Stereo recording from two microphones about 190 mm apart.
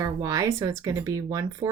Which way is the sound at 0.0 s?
15° right (ahead or behind).